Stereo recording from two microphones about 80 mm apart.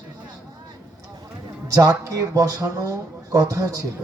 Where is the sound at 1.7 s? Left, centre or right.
Right.